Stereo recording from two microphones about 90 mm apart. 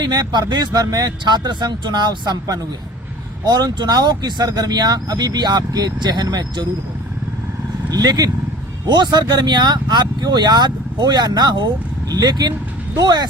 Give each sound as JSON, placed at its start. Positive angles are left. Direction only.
{"t": 0.0, "sound": "speech", "side_deg": -50}
{"t": 7.9, "sound": "speech", "side_deg": -45}